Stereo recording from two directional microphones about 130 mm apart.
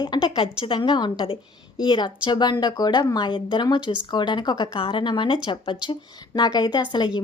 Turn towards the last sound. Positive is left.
turn(degrees=40)  # may be behind; listen again after turning